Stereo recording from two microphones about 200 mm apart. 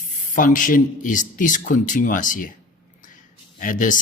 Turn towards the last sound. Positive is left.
turn(degrees=40)  # may be behind; listen again after turning